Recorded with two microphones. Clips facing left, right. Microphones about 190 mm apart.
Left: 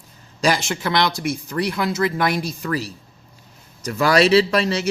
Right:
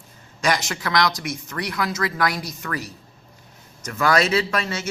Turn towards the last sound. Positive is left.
turn(degrees=35)  # may be behind; listen again after turning